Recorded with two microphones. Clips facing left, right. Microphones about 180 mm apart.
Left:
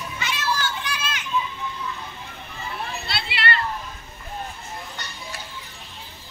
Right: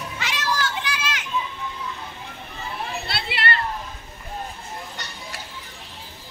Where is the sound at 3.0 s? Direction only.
50° right (ahead or behind).